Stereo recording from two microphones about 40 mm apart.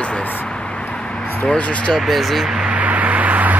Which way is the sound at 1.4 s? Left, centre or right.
Left.